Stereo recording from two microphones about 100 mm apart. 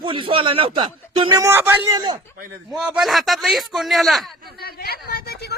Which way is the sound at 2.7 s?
10° right (ahead or behind).